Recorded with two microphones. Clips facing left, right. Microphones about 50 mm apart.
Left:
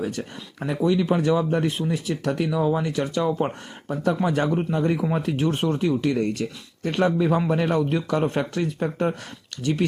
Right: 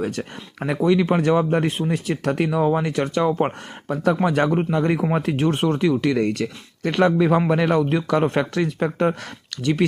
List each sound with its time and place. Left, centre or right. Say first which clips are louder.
0.0 s speech: right 3 dB; right
5.8 s speech: right 3 dB; right